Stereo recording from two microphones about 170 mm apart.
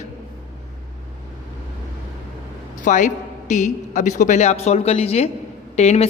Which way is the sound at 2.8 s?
50° left (ahead or behind).